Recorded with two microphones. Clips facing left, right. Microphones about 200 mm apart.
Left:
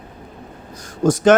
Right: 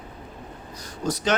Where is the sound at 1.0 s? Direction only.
50° left (ahead or behind).